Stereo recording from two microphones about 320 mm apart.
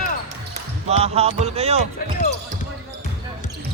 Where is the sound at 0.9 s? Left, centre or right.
Centre.